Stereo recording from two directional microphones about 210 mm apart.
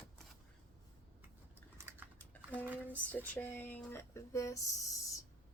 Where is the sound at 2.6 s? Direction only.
10° right (ahead or behind).